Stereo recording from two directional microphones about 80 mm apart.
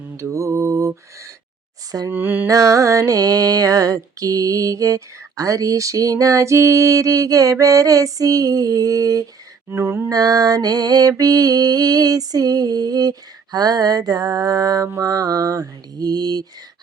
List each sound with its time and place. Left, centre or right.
0.2 s mantra: right
2.0 s a sound: right
2.5 s music: right
9.6 s mantra: right
10.1 s music: right